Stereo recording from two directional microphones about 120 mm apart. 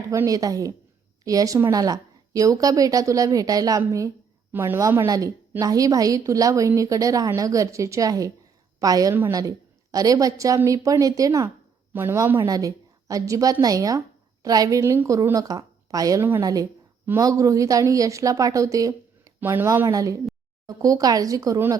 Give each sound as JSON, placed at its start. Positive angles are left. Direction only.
{"t": 0.1, "sound": "a woman's voice", "side_deg": -25}